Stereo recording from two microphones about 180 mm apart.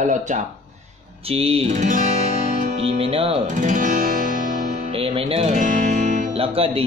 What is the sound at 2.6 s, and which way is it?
Music, 35° right (ahead or behind).